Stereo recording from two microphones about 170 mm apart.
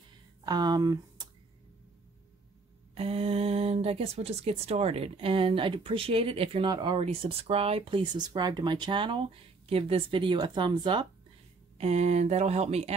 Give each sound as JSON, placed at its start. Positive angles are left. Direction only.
{"t": 0.5, "sound": "speech", "side_deg": -25}
{"t": 2.9, "sound": "speech", "side_deg": -35}
{"t": 11.8, "sound": "speech", "side_deg": -40}